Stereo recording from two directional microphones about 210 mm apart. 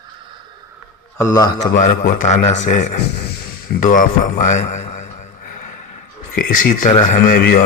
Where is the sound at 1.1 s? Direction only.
15° left (ahead or behind).